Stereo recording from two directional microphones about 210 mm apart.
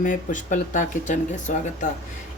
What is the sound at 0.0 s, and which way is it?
A woman's voice, 35° left (ahead or behind).